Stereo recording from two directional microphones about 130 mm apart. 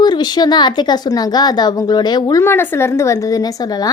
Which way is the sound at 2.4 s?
20° left (ahead or behind).